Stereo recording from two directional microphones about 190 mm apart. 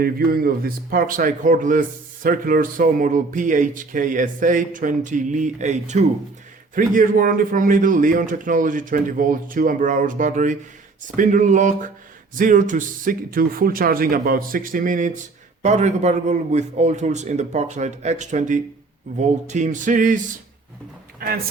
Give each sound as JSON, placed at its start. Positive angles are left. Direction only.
{"t": 0.0, "sound": "a man's voice", "side_deg": -50}